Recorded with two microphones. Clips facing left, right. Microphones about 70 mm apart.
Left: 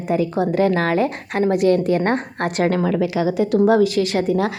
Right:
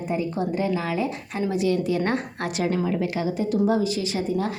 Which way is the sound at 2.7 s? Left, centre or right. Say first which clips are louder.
Left 5 dB; left.